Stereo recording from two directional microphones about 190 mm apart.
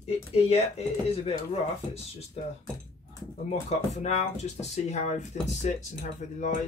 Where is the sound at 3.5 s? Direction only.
35° left (ahead or behind).